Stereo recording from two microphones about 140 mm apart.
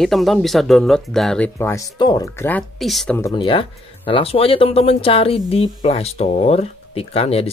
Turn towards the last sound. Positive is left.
turn(degrees=45)  # may be behind; listen again after turning